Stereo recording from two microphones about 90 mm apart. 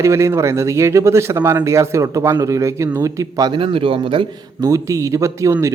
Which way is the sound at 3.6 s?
80° right.